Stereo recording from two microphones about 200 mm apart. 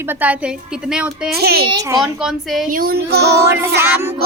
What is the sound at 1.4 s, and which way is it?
Music, 50° right (ahead or behind).